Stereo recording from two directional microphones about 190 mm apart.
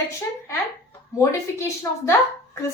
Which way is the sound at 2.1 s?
15° left (ahead or behind).